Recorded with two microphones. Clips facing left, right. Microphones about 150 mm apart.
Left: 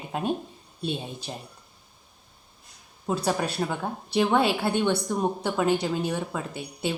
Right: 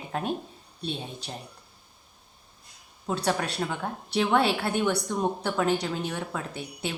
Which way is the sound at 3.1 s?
5° left (ahead or behind).